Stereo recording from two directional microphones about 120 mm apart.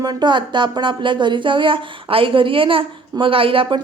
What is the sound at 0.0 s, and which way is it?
Speech, 35° right (ahead or behind).